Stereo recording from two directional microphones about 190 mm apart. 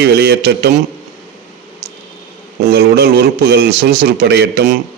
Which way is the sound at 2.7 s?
55° right (ahead or behind).